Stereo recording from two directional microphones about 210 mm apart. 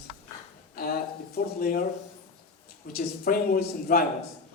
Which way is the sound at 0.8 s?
45° left (ahead or behind).